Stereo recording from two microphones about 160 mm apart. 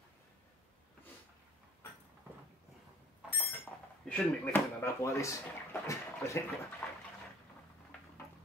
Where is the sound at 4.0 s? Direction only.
10° left (ahead or behind).